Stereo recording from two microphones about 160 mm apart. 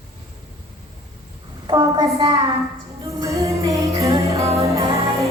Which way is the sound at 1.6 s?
25° right (ahead or behind).